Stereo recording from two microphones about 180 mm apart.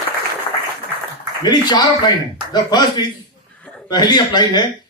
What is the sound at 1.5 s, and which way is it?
Speech, 25° left (ahead or behind).